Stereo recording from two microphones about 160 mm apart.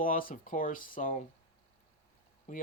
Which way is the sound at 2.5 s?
55° left (ahead or behind).